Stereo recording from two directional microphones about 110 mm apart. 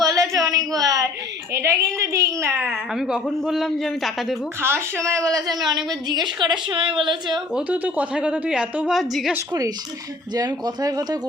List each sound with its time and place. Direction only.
0.0 s a sound: 30° right (ahead or behind)
1.5 s a woman's voice: 25° right (ahead or behind)
2.9 s a man's voice: 5° right (ahead or behind)
4.6 s a woman's voice: 25° right (ahead or behind); by 7.4 s 45° right (ahead or behind)
7.5 s a woman's voice: 15° right (ahead or behind)
9.5 s a woman's voice: 35° right (ahead or behind)